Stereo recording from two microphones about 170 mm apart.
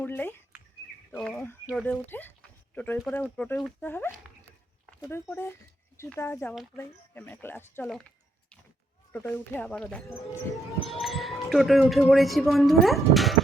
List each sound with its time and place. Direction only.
0.0 s bird: 10° left (ahead or behind)
1.3 s speech: 15° left (ahead or behind)
9.1 s speech: 10° left (ahead or behind)